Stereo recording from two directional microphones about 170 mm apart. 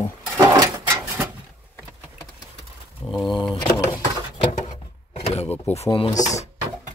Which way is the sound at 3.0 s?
Centre (ahead or behind).